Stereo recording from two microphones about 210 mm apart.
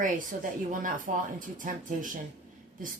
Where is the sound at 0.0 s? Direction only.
40° right (ahead or behind).